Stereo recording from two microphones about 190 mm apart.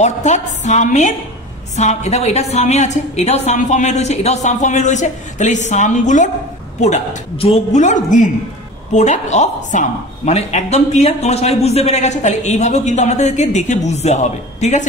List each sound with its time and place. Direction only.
0.0 s a woman's voice: 40° left (ahead or behind)